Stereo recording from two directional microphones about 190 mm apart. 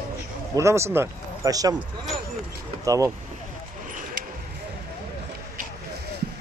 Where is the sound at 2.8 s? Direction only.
15° right (ahead or behind).